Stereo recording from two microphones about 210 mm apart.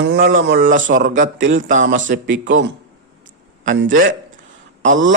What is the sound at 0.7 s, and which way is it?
Speech, 40° right (ahead or behind).